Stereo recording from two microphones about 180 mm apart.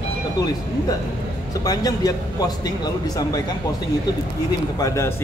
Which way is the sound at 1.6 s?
20° left (ahead or behind).